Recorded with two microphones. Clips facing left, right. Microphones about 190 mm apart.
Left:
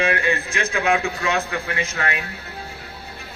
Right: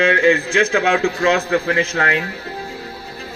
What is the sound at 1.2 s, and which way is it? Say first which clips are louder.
A man's voice: right 8 dB; 30° right (ahead or behind).